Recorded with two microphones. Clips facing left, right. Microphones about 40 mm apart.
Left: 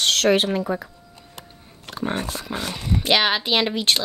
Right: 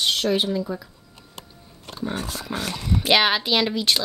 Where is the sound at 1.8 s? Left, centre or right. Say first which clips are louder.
Left 2 dB; left.